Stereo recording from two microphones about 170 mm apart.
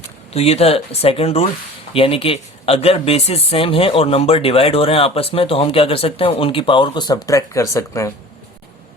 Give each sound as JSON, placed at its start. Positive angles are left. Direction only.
{"t": 0.3, "sound": "speech", "side_deg": 35}